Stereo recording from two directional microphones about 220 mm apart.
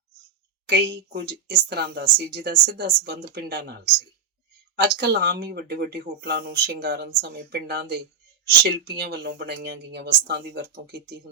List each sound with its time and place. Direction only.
0.7 s speech: 50° right (ahead or behind)
4.8 s speech: 45° right (ahead or behind)